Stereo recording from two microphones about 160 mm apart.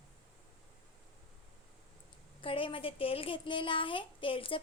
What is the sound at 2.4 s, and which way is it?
A child's voice, 35° left (ahead or behind).